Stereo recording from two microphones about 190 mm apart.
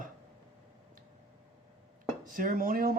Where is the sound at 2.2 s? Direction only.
45° right (ahead or behind).